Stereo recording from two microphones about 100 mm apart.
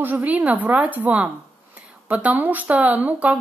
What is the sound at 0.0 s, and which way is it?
Speech, 15° right (ahead or behind).